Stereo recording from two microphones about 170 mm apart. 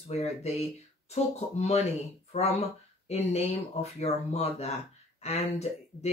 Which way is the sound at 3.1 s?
40° left (ahead or behind).